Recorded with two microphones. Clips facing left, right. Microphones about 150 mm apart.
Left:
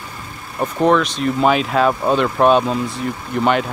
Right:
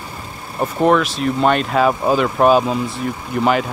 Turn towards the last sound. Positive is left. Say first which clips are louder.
# even
turn(degrees=0)  # may be behind; listen again after turning